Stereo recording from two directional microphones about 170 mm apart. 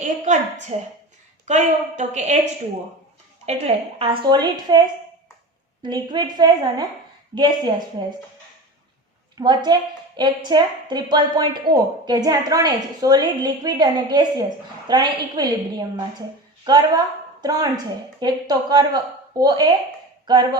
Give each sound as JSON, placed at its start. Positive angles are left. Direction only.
{"t": 0.0, "sound": "a woman's voice", "side_deg": -45}
{"t": 9.4, "sound": "a woman's voice", "side_deg": -25}
{"t": 16.6, "sound": "a woman's voice", "side_deg": -25}